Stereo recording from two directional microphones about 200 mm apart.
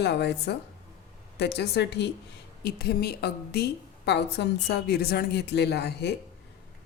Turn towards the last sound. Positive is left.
turn(degrees=55)  # may be behind; listen again after turning